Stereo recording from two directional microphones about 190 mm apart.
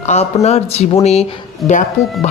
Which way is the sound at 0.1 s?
35° left (ahead or behind).